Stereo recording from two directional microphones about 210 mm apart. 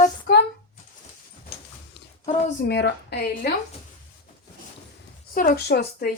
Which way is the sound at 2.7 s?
55° left (ahead or behind).